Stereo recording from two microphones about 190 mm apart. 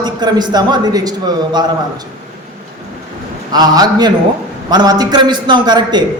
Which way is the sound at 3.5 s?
20° right (ahead or behind).